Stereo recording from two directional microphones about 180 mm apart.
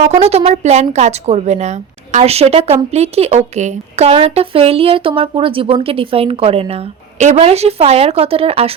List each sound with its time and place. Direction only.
0.0 s speech: 35° right (ahead or behind)